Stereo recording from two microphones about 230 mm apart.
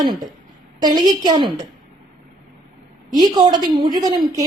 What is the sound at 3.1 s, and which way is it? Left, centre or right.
A woman's voice, centre.